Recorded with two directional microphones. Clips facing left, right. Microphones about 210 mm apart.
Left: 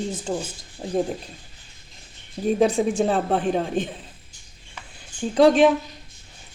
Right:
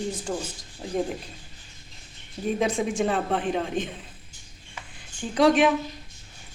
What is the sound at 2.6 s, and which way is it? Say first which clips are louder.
Speech: left 5 dB; 35° left (ahead or behind).